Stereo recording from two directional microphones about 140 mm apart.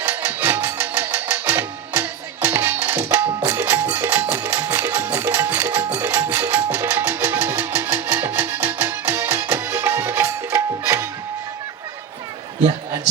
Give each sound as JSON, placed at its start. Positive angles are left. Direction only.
{"t": 0.0, "sound": "music", "side_deg": -15}